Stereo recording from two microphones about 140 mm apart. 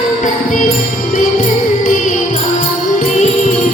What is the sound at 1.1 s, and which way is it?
Music, 65° left (ahead or behind).